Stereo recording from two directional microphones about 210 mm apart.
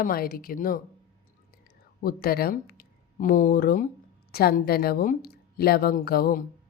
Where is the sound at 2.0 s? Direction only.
45° left (ahead or behind).